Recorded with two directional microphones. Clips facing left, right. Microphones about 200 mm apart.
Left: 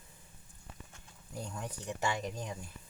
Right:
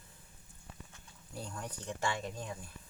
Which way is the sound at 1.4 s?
15° left (ahead or behind).